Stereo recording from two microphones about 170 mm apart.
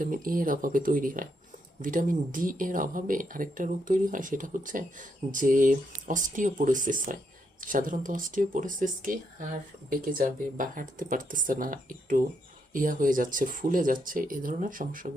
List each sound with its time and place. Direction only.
0.0 s speech: 55° right (ahead or behind)